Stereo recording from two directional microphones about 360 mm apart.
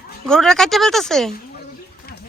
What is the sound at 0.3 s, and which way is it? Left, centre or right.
A woman's voice, centre.